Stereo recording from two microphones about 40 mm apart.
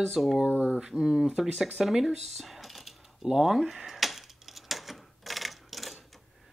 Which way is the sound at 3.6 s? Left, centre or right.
Centre.